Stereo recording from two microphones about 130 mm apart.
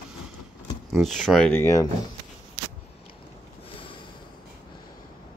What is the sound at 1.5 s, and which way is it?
Speech, 20° left (ahead or behind).